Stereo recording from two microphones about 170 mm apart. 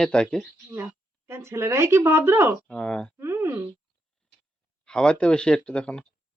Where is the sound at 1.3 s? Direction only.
15° right (ahead or behind).